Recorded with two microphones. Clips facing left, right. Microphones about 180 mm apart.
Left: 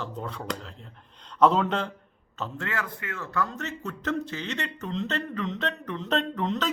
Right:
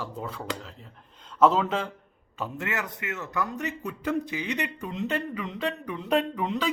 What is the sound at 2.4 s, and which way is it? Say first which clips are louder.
A man's voice: right 1 dB; 15° right (ahead or behind).